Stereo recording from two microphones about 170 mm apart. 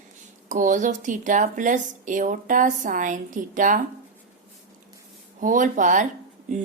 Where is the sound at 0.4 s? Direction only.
50° right (ahead or behind).